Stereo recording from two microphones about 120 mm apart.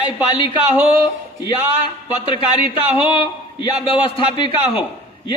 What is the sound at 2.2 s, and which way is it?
Speech, 45° left (ahead or behind).